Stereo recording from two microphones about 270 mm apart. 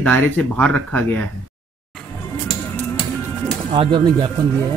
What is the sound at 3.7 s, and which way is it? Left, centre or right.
Speech, centre.